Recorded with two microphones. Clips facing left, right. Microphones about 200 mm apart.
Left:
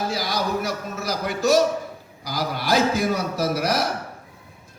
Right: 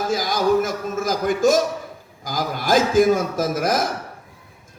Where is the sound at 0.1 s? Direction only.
50° right (ahead or behind).